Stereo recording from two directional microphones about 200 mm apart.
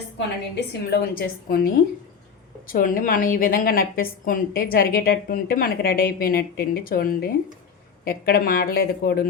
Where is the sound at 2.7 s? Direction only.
45° left (ahead or behind).